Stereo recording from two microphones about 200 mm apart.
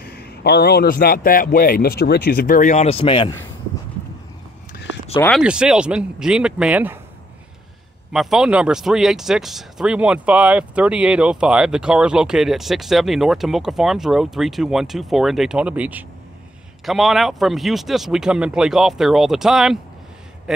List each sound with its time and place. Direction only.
0.0 s a man's voice: 50° left (ahead or behind); by 3.3 s 25° left (ahead or behind)
5.3 s speech: 5° right (ahead or behind)
8.1 s speech: centre (ahead or behind)